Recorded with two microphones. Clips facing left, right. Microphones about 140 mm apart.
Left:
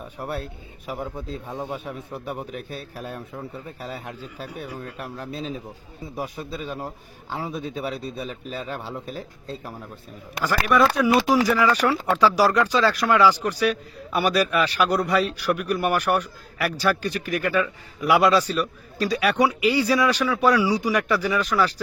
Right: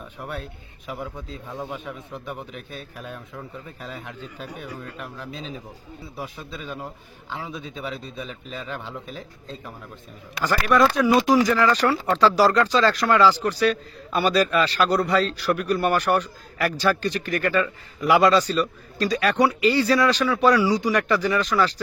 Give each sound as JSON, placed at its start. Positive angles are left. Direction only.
{"t": 0.2, "sound": "a man's voice", "side_deg": 40}
{"t": 10.4, "sound": "speech", "side_deg": 10}